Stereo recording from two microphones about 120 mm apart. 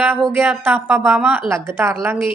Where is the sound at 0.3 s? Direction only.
15° right (ahead or behind).